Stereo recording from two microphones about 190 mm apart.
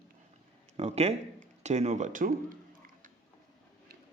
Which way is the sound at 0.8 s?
35° right (ahead or behind).